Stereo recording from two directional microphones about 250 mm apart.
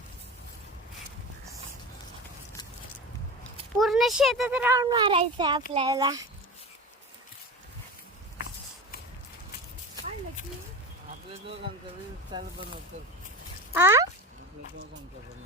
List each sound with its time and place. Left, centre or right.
3.8 s speech: centre
12.3 s speech: right
13.7 s a sound: centre